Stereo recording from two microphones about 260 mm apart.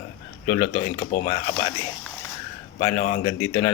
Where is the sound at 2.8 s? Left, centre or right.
Left.